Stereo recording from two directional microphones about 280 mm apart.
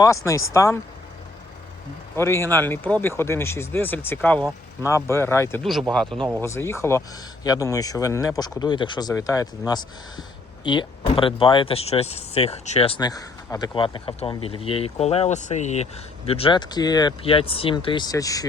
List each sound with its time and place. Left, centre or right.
0.0 s speech: centre
2.1 s a man's voice: centre